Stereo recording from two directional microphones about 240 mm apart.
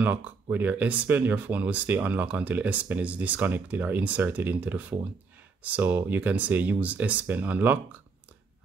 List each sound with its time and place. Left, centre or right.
0.0 s speech: centre